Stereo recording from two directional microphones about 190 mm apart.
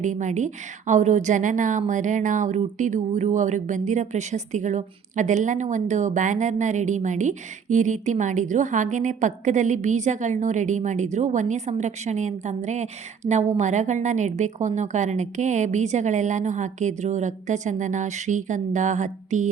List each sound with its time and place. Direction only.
0.0 s a woman's voice: 40° right (ahead or behind)